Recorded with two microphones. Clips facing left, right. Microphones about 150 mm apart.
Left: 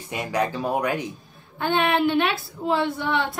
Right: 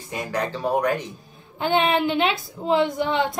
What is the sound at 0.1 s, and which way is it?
Speech, 10° left (ahead or behind).